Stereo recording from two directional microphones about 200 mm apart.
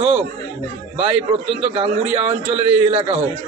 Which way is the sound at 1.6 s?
30° right (ahead or behind).